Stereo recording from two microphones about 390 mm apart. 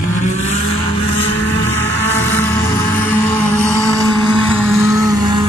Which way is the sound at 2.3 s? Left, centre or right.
Centre.